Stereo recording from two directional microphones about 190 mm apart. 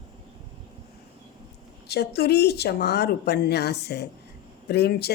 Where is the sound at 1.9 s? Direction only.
60° left (ahead or behind).